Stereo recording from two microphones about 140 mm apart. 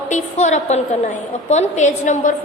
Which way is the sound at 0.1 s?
55° left (ahead or behind).